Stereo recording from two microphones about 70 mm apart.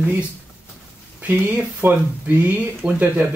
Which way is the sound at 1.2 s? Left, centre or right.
Right.